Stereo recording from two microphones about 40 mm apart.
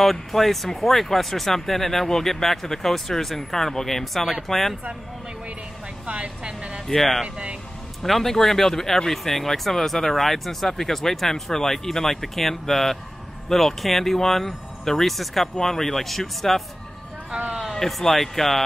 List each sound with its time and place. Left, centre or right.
0.0 s speech: centre
6.0 s a sound: right
6.9 s speech: centre
17.7 s speech: centre